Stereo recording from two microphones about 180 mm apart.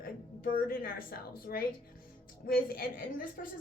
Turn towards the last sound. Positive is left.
turn(degrees=55)  # may be behind; listen again after turning